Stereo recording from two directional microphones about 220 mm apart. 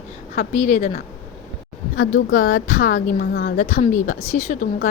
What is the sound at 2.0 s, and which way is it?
Speech, 65° left (ahead or behind).